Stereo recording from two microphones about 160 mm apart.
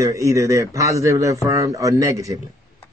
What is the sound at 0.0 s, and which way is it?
Speech, 20° right (ahead or behind).